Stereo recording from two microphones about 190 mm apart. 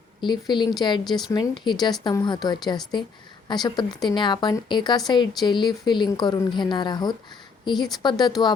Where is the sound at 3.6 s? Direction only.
20° left (ahead or behind).